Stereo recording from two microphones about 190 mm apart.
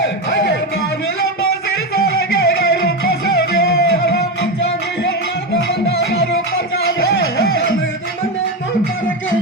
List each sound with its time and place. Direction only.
0.0 s music: 65° left (ahead or behind)
2.5 s music: 55° left (ahead or behind)
7.0 s music: 55° left (ahead or behind)